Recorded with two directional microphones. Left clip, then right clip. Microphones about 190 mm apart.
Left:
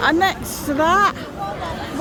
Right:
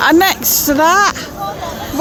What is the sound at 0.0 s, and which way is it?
A woman's voice, 35° right (ahead or behind).